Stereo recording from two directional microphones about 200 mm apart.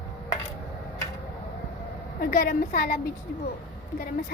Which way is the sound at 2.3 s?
45° left (ahead or behind).